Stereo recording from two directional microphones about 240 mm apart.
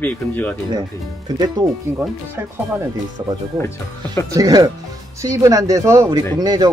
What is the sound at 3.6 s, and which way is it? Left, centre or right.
Speech, centre.